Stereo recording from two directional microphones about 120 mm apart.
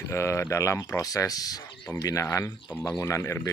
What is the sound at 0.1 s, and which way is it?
Speech, 25° left (ahead or behind).